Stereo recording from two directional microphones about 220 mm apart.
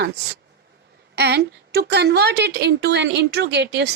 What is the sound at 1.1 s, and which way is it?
A woman's voice, 50° right (ahead or behind).